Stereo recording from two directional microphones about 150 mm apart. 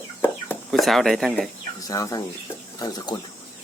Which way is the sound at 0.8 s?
Centre (ahead or behind).